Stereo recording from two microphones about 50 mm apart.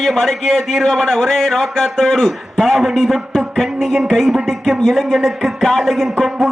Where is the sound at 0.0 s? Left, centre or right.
Centre.